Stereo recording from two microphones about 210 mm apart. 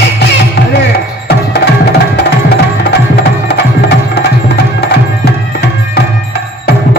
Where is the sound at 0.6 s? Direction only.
50° left (ahead or behind).